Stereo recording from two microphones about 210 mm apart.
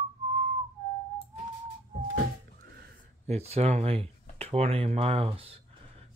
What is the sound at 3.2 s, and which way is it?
Speech, 30° right (ahead or behind).